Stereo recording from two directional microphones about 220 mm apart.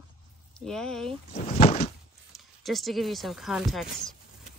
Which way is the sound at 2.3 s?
Centre (ahead or behind).